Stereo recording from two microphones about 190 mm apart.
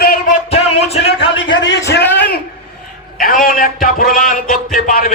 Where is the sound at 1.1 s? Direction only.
70° left (ahead or behind).